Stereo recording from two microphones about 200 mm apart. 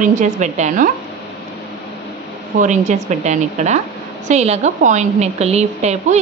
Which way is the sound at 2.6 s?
35° right (ahead or behind).